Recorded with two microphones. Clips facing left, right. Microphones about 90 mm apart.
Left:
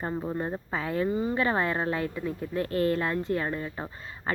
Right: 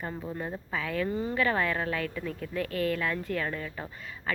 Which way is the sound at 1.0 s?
15° left (ahead or behind).